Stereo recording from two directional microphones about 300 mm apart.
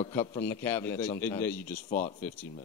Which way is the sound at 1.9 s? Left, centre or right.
Left.